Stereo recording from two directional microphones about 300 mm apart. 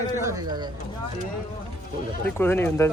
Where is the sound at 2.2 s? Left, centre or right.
Centre.